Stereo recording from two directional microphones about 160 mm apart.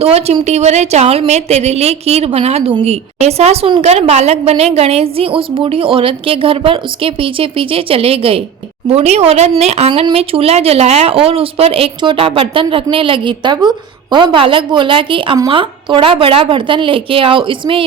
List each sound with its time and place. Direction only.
0.0 s a woman's voice: 40° right (ahead or behind)